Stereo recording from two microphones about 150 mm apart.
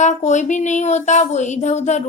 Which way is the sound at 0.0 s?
50° left (ahead or behind).